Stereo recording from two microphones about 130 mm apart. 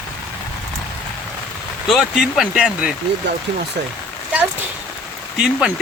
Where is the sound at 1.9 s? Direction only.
Centre (ahead or behind).